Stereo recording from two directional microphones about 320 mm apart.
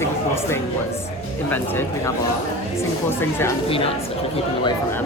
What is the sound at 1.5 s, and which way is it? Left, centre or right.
Speech, centre.